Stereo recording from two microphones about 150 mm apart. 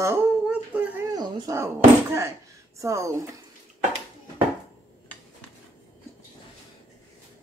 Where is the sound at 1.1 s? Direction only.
30° right (ahead or behind).